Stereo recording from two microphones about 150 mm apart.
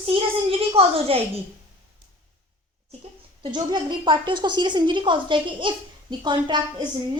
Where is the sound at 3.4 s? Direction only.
30° right (ahead or behind).